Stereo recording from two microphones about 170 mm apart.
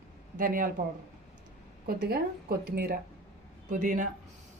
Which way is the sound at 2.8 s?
60° right (ahead or behind).